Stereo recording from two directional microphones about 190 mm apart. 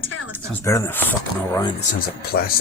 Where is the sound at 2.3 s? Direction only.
55° left (ahead or behind).